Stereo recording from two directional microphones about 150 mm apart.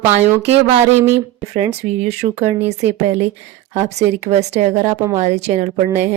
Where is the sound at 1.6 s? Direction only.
45° right (ahead or behind).